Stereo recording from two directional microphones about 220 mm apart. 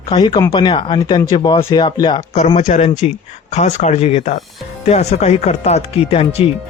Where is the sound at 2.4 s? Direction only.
30° left (ahead or behind).